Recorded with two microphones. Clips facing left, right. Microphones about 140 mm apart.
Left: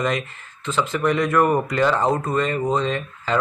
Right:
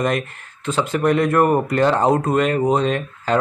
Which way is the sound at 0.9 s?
50° right (ahead or behind).